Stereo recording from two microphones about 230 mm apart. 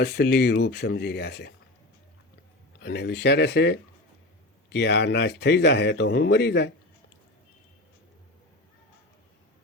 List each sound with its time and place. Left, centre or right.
0.0 s speech: left
2.8 s speech: left